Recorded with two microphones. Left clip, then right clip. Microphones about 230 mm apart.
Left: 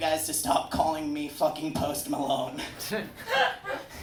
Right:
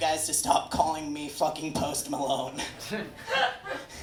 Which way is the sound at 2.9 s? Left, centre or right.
Left.